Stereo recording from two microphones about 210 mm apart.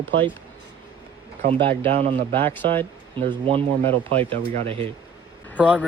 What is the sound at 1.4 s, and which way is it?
Speech, 25° right (ahead or behind).